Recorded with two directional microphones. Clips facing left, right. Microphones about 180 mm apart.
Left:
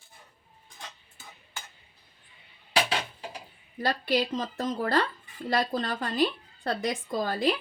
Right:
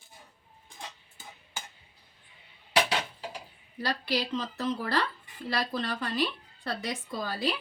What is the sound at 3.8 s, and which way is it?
Speech, 50° left (ahead or behind).